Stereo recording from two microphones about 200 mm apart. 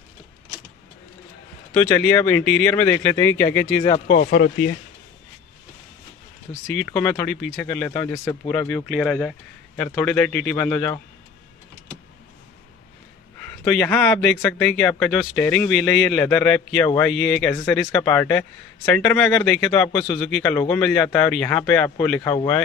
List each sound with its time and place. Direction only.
1.8 s speech: 10° left (ahead or behind)
3.8 s speech: 25° left (ahead or behind)
4.2 s speech: 50° left (ahead or behind)
6.5 s speech: 5° left (ahead or behind)
8.6 s speech: centre (ahead or behind)
13.5 s speech: 10° left (ahead or behind)